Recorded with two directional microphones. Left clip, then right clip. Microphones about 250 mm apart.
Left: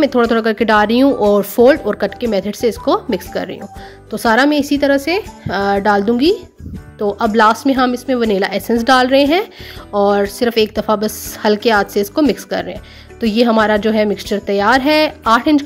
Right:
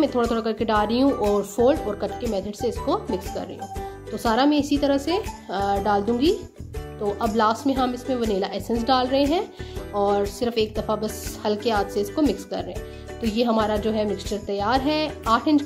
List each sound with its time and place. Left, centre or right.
0.0 s a woman's voice: left